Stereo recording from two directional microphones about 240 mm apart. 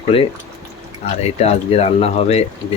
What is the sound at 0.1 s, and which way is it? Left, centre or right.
Speech, left.